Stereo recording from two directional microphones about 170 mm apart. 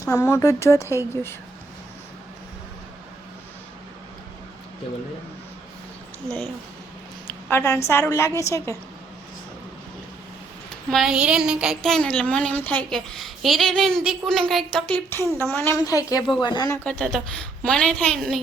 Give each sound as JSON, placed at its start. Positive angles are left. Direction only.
{"t": 0.0, "sound": "a woman's voice", "side_deg": 20}
{"t": 7.3, "sound": "a woman's voice", "side_deg": 10}
{"t": 10.8, "sound": "a woman's voice", "side_deg": 0}
{"t": 16.8, "sound": "a woman's voice", "side_deg": 5}